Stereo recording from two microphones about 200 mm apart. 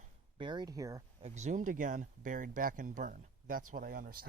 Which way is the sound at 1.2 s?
35° right (ahead or behind).